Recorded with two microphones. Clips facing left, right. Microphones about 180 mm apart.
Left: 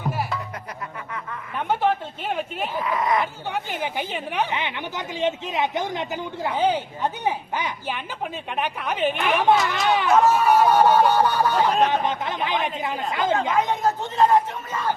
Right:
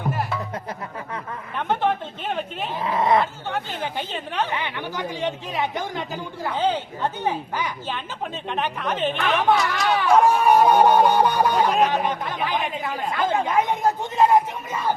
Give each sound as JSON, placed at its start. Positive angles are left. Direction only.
{"t": 1.5, "sound": "a sound", "side_deg": 10}
{"t": 2.8, "sound": "speech", "side_deg": -30}
{"t": 3.5, "sound": "a woman's voice", "side_deg": 15}
{"t": 10.2, "sound": "speech", "side_deg": -15}
{"t": 11.9, "sound": "speech", "side_deg": 20}
{"t": 13.7, "sound": "speech", "side_deg": -10}